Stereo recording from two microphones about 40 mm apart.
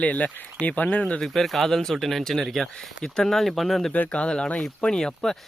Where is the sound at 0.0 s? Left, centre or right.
Left.